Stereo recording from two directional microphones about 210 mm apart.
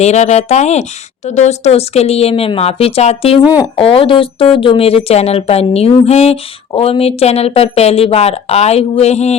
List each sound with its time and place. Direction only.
0.0 s speech: 30° left (ahead or behind)